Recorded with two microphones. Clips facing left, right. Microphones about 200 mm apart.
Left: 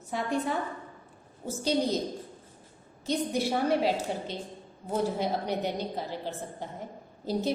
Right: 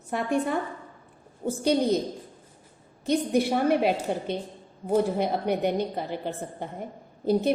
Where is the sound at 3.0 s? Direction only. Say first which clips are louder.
Right 5 dB; 60° right (ahead or behind).